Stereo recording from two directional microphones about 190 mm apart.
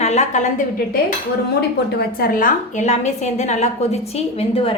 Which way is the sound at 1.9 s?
55° left (ahead or behind).